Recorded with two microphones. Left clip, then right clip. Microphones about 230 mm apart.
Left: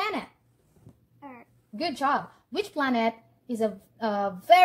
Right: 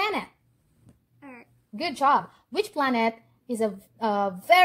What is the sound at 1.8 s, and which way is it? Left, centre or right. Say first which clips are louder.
Speech: right 4 dB; right.